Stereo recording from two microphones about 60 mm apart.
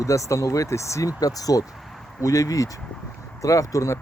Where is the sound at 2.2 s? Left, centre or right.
Left.